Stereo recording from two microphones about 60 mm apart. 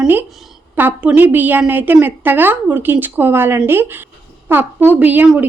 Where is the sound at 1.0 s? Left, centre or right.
Right.